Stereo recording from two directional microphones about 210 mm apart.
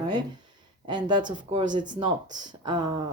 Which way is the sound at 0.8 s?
20° right (ahead or behind).